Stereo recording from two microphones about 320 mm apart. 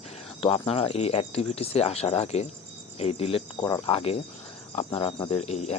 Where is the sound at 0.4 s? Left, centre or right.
Centre.